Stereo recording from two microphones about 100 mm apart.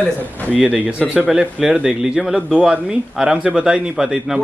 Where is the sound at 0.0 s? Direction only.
15° left (ahead or behind).